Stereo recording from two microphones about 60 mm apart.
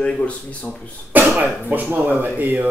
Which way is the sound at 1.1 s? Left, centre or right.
Right.